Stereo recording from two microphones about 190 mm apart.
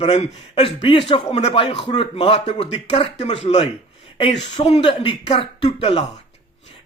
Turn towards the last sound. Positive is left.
turn(degrees=30)  # may be behind; listen again after turning